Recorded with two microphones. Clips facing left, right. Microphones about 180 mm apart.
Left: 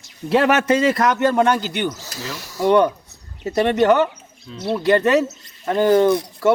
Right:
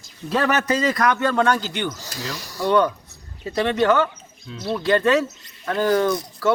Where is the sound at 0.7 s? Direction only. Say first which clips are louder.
Left 3 dB; 25° left (ahead or behind).